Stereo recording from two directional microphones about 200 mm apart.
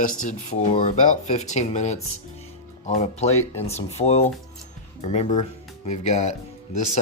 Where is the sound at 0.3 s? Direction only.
35° left (ahead or behind).